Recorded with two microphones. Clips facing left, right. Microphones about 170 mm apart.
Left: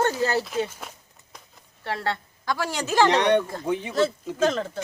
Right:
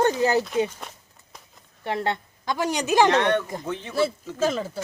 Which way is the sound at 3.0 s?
15° left (ahead or behind).